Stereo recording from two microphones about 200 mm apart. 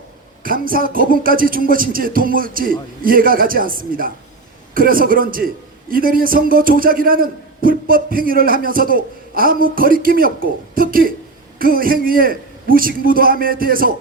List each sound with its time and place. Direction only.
0.4 s a man's voice: 45° right (ahead or behind)